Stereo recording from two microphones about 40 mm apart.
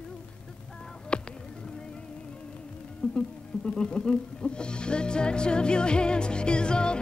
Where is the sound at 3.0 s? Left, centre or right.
Left.